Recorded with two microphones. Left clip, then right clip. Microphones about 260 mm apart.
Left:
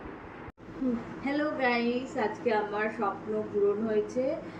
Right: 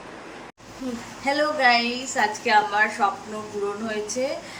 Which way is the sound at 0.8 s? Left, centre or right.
Centre.